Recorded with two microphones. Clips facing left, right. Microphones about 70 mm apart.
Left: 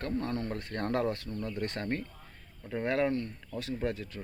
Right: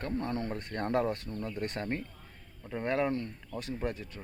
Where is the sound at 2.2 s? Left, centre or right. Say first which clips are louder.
Left 1 dB; centre.